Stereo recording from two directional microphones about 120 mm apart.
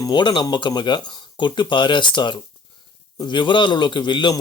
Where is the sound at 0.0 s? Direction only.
40° left (ahead or behind).